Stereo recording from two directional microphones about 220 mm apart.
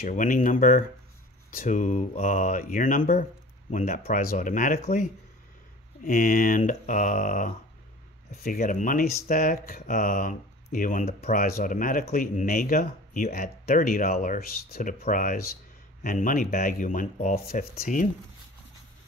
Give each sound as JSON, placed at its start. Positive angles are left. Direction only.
{"t": 0.0, "sound": "speech", "side_deg": 35}
{"t": 6.0, "sound": "speech", "side_deg": 40}